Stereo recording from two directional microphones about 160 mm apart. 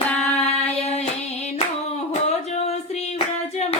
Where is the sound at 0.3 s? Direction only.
40° left (ahead or behind).